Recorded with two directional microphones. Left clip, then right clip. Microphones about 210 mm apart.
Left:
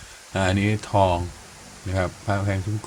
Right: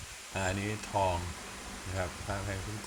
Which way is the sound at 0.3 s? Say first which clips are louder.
Left 11 dB; 25° left (ahead or behind).